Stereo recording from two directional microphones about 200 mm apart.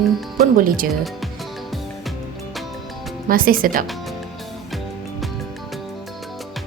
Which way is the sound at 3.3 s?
45° right (ahead or behind).